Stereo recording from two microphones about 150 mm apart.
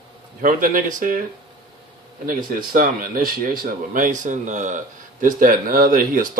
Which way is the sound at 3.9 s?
60° right (ahead or behind).